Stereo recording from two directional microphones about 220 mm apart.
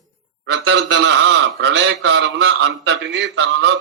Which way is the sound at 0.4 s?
50° right (ahead or behind).